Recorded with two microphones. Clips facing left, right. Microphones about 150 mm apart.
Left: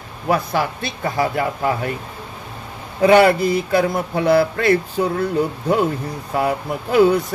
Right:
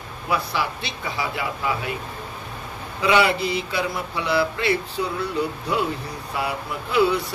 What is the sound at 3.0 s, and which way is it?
Speech, 50° left (ahead or behind).